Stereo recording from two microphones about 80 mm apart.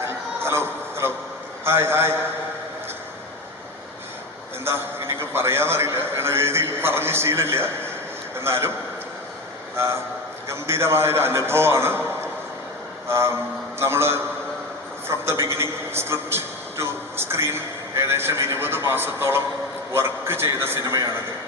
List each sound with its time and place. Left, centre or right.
0.0 s music: right
1.6 s a man's voice: right
4.6 s a man's voice: right
9.7 s a man's voice: right